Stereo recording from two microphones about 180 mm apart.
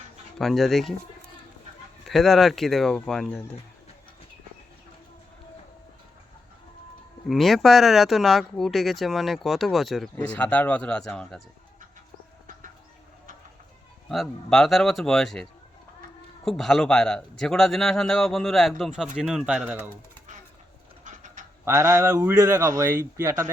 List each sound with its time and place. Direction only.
0.3 s speech: centre (ahead or behind)
2.0 s speech: centre (ahead or behind)
7.3 s speech: centre (ahead or behind)
14.1 s speech: centre (ahead or behind)
21.0 s a sound: 45° right (ahead or behind)
21.6 s speech: 15° right (ahead or behind)